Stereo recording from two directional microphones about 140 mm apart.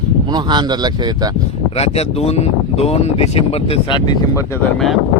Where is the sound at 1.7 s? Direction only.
45° left (ahead or behind); by 4.4 s 30° left (ahead or behind).